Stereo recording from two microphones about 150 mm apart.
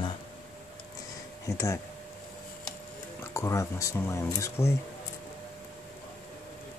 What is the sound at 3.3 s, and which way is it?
Speech, 20° left (ahead or behind).